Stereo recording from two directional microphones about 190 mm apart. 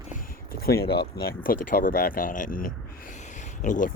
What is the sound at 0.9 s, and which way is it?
Speech, 60° left (ahead or behind).